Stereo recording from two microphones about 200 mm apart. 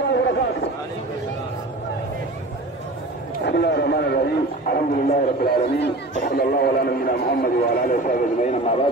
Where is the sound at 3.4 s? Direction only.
55° left (ahead or behind).